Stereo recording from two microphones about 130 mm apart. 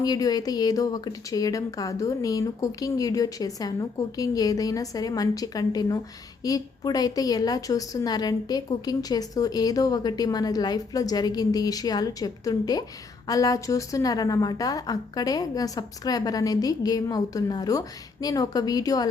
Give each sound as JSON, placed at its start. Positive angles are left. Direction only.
{"t": 0.0, "sound": "a woman's voice", "side_deg": 30}